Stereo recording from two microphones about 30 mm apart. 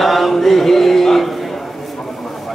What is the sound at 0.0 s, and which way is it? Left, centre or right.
Chant, centre.